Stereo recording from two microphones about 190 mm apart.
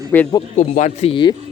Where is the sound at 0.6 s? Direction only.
40° left (ahead or behind).